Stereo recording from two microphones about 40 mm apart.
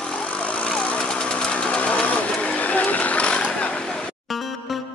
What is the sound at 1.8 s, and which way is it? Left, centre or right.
Vehicle, left.